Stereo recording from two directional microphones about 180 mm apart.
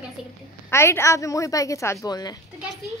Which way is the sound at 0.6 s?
15° left (ahead or behind).